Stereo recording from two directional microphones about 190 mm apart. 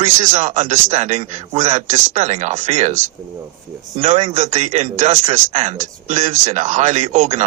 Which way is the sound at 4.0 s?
35° right (ahead or behind).